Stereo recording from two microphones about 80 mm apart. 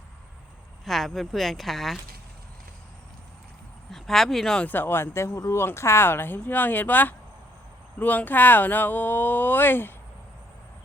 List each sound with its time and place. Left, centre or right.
0.9 s speech: centre
3.9 s speech: centre
4.6 s speech: left